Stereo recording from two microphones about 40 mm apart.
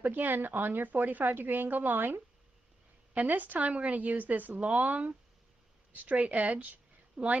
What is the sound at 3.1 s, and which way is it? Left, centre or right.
A woman's voice, right.